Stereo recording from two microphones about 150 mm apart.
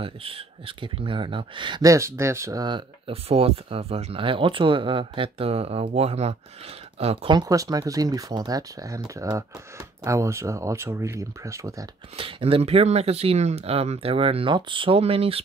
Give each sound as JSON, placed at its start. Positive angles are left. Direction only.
{"t": 0.0, "sound": "speech", "side_deg": -35}
{"t": 12.2, "sound": "speech", "side_deg": -40}